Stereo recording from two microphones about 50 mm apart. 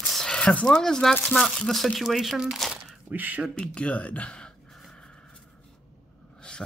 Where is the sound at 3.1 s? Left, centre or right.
Right.